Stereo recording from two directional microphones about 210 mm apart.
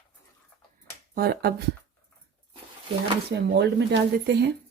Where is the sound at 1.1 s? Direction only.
50° right (ahead or behind).